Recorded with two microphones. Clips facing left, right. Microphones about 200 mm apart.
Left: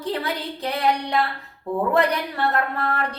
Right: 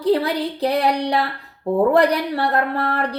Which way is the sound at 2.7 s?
35° right (ahead or behind).